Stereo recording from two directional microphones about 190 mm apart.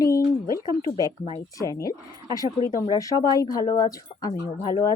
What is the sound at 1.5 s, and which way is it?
Speech, 20° left (ahead or behind).